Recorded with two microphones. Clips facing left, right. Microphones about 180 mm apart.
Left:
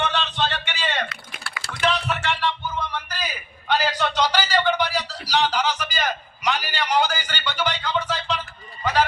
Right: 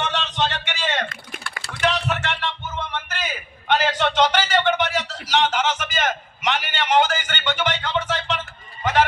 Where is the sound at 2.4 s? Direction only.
20° right (ahead or behind).